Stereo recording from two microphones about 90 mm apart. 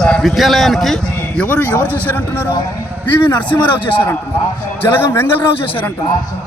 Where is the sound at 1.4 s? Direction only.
20° left (ahead or behind).